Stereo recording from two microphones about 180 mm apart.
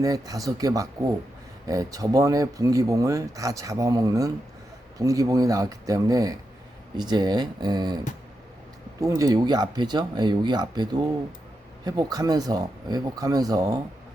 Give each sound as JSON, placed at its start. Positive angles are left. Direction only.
{"t": 0.0, "sound": "speech", "side_deg": -20}